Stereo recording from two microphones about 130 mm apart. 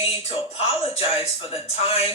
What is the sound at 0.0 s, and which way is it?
Speech, 50° left (ahead or behind).